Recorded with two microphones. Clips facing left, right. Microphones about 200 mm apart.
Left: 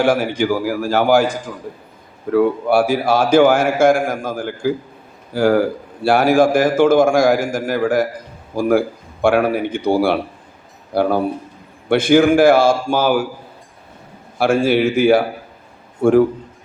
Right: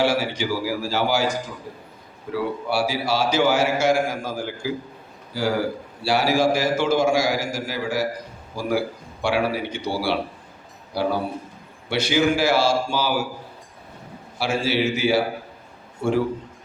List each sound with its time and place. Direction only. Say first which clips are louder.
0.0 s a man's voice: left 6 dB; 50° left (ahead or behind)
14.3 s a man's voice: left 8 dB; 50° left (ahead or behind)